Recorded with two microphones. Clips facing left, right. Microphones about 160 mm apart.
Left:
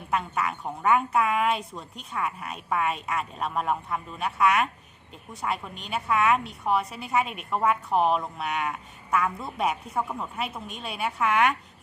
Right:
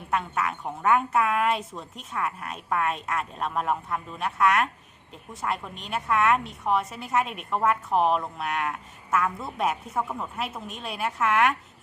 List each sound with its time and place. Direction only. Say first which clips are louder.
0.1 s a woman's voice: even; centre (ahead or behind)